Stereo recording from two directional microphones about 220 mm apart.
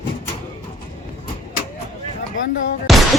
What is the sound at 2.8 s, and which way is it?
Music, centre (ahead or behind).